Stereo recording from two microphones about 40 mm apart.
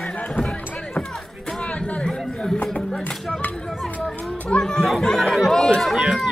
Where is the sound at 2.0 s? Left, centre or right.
Centre.